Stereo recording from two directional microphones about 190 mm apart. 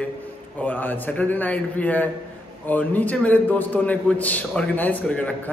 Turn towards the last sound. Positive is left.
turn(degrees=5)  # may be behind; listen again after turning